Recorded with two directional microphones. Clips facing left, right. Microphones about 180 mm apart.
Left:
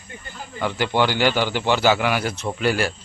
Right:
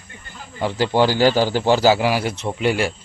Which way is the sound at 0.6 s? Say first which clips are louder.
Right 3 dB; 30° right (ahead or behind).